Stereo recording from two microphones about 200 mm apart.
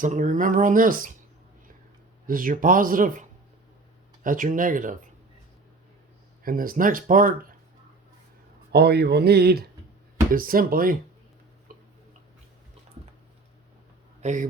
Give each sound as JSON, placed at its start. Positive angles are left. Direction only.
{"t": 0.0, "sound": "speech", "side_deg": -40}
{"t": 2.2, "sound": "speech", "side_deg": -45}
{"t": 6.4, "sound": "speech", "side_deg": -45}
{"t": 8.7, "sound": "speech", "side_deg": -55}
{"t": 11.7, "sound": "tick-tock", "side_deg": -45}
{"t": 14.2, "sound": "speech", "side_deg": -35}